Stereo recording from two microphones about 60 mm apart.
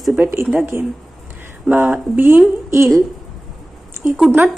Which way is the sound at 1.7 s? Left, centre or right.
Right.